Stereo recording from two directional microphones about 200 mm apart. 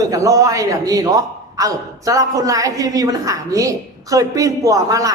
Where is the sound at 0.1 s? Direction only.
15° right (ahead or behind).